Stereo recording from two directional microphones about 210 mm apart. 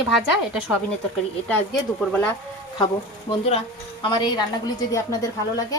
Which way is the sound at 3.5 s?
25° left (ahead or behind).